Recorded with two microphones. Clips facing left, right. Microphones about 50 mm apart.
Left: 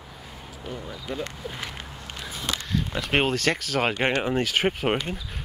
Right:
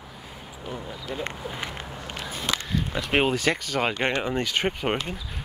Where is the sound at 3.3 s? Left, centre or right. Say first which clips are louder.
Even; centre.